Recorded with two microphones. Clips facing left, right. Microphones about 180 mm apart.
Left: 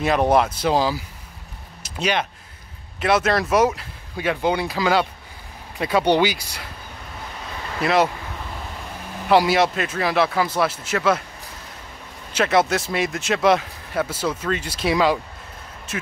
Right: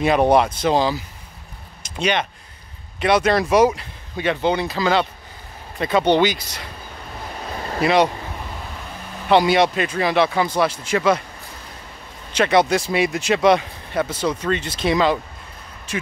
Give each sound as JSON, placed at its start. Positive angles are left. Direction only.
{"t": 0.0, "sound": "speech", "side_deg": 0}
{"t": 1.8, "sound": "a sound", "side_deg": 5}
{"t": 3.0, "sound": "speech", "side_deg": 0}
{"t": 7.5, "sound": "a sound", "side_deg": -40}
{"t": 7.8, "sound": "speech", "side_deg": 0}
{"t": 9.3, "sound": "speech", "side_deg": 5}
{"t": 12.3, "sound": "speech", "side_deg": 5}